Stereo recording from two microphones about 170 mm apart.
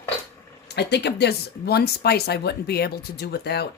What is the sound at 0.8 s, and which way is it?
Speech, 80° left.